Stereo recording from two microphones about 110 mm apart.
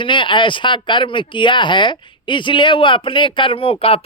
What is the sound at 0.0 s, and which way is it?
Speech, 50° left (ahead or behind).